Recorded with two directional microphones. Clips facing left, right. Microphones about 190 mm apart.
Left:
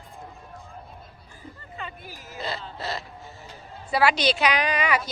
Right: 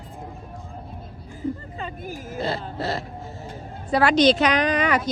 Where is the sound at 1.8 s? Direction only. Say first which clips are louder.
Right 6 dB; 40° right (ahead or behind).